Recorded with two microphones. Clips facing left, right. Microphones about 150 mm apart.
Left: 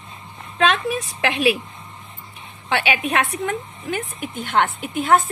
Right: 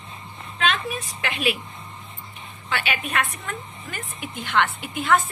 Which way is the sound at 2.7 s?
70° left (ahead or behind).